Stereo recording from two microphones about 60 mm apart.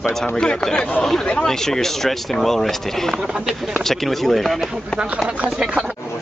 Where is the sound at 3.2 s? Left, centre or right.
Centre.